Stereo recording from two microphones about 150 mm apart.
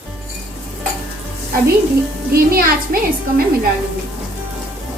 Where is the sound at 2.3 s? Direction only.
80° right.